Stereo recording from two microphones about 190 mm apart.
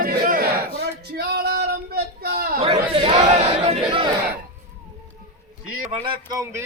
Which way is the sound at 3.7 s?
30° right (ahead or behind).